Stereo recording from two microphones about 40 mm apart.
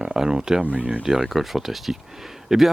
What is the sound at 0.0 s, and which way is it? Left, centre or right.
Speech, centre.